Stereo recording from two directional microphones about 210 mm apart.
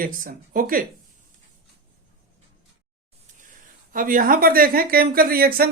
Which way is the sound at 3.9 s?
40° right (ahead or behind).